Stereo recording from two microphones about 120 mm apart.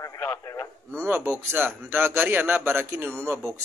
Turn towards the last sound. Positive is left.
turn(degrees=-20)  # may be behind; listen again after turning